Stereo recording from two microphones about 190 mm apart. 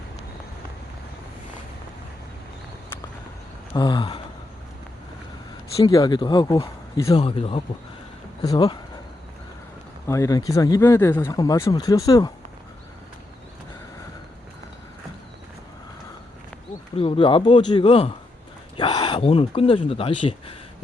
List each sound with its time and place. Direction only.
3.8 s speech: 25° left (ahead or behind)
5.7 s speech: 20° left (ahead or behind)
10.1 s speech: 15° left (ahead or behind)
17.0 s speech: 30° left (ahead or behind)